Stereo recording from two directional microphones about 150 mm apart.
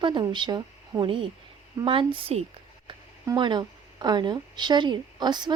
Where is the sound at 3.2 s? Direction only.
25° right (ahead or behind).